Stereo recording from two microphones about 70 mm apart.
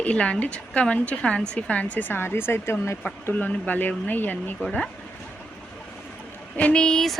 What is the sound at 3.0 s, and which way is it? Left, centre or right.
Speech, left.